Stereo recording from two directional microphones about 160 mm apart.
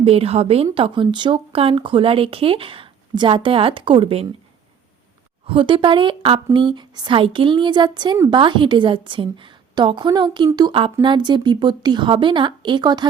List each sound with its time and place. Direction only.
0.0 s speech: 40° right (ahead or behind)
5.5 s speech: 35° right (ahead or behind)